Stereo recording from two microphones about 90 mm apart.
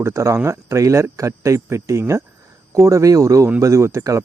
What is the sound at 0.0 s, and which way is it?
Speech, 30° right (ahead or behind).